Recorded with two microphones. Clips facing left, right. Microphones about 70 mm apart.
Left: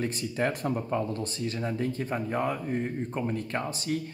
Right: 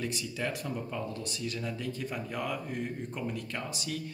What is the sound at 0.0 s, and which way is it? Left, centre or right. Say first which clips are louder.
Speech: left 6 dB; left.